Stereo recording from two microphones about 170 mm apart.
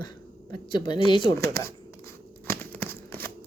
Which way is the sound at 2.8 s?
10° left (ahead or behind).